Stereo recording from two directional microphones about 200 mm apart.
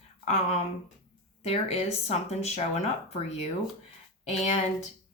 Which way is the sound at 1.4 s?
30° left (ahead or behind).